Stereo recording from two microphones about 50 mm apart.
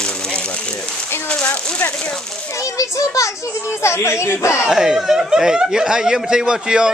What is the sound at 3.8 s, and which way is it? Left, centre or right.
Speech, left.